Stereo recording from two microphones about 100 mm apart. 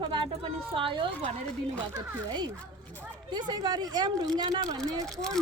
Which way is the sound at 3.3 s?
45° right (ahead or behind).